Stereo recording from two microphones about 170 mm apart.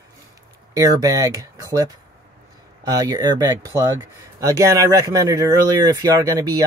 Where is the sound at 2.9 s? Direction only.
20° right (ahead or behind).